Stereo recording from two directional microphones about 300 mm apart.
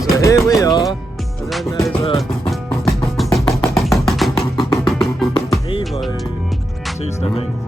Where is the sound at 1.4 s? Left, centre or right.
Centre.